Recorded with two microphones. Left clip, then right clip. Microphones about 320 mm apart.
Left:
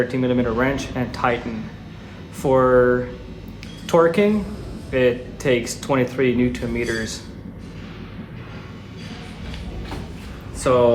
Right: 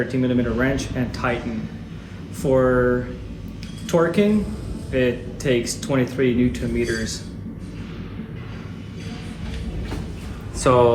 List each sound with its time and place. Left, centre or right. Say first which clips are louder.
0.1 s speech: left 1 dB; left
2.4 s speech: left 3 dB; centre
10.6 s speech: even; centre